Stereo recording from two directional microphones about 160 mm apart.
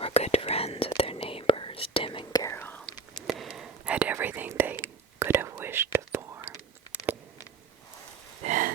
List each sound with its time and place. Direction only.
0.0 s whispering: 40° left (ahead or behind); by 2.8 s 15° left (ahead or behind)
3.2 s whispering: centre (ahead or behind); by 6.5 s 15° right (ahead or behind)
8.4 s a sound: 55° right (ahead or behind)